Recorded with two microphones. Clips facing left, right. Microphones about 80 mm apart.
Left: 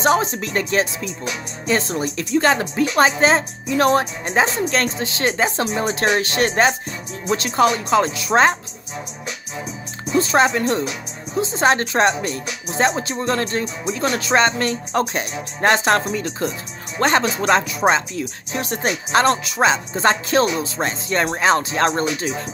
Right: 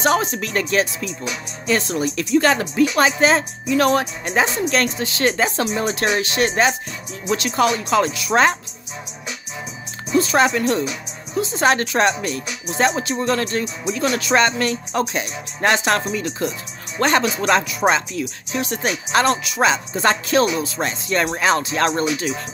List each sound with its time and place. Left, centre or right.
0.0 s speech: left
10.1 s speech: left